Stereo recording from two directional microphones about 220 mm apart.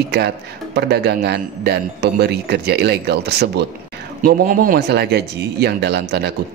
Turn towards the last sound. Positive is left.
turn(degrees=-50)  # may be behind; listen again after turning